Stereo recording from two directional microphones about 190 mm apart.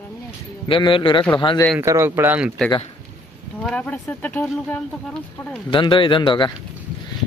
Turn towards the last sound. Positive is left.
turn(degrees=25)  # may be behind; listen again after turning